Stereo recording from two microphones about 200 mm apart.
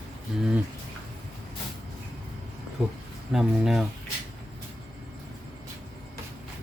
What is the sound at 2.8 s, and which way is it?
Speech, 5° right (ahead or behind).